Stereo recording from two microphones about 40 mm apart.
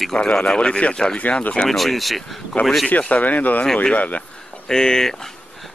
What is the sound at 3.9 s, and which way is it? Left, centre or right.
Speech, left.